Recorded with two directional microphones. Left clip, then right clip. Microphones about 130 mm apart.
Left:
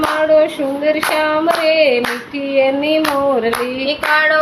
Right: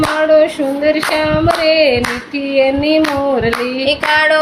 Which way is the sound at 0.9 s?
10° right (ahead or behind).